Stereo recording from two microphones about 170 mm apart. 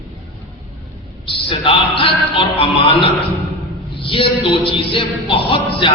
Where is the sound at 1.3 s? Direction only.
30° left (ahead or behind).